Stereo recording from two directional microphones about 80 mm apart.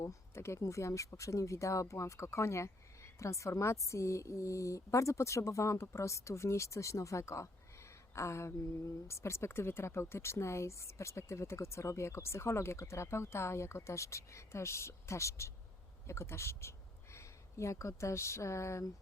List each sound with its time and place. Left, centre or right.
0.0 s speech: left